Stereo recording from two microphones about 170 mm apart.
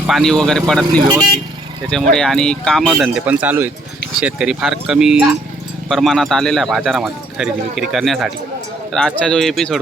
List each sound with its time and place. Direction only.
0.1 s speech: centre (ahead or behind)
1.0 s speech: 25° right (ahead or behind)
1.9 s speech: 5° left (ahead or behind)